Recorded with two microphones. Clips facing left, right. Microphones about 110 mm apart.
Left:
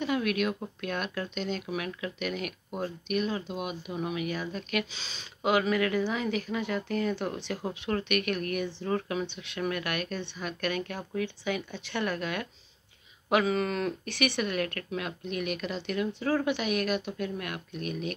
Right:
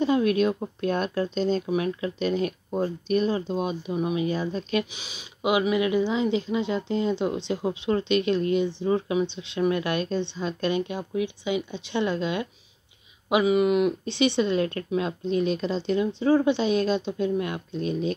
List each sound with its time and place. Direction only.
0.0 s speech: 30° right (ahead or behind)
4.9 s speech: 15° right (ahead or behind)